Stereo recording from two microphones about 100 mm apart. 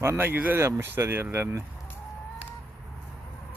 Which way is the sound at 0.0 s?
25° right (ahead or behind).